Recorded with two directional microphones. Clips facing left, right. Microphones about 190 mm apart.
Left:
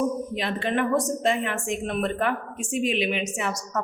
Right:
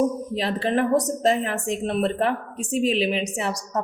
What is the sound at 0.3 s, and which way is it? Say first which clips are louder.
A woman's voice: right 6 dB; 35° right (ahead or behind).